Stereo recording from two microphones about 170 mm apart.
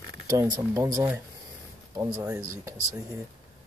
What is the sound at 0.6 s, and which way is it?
Speech, 15° right (ahead or behind).